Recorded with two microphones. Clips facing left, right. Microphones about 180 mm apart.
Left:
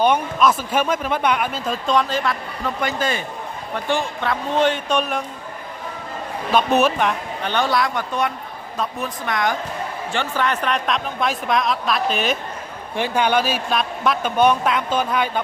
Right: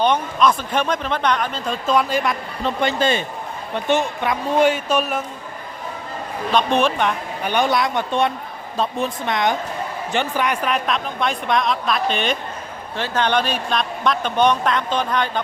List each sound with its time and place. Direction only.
0.0 s a man's voice: 5° left (ahead or behind); by 2.3 s 10° right (ahead or behind)
2.6 s a man's voice: 25° right (ahead or behind); by 5.2 s 5° right (ahead or behind)
6.5 s a man's voice: 5° left (ahead or behind)
7.4 s a man's voice: 15° right (ahead or behind); by 15.3 s 5° left (ahead or behind)